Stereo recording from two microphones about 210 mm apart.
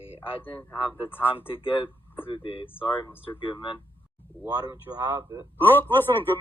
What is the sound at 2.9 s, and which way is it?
Speech, 10° left (ahead or behind).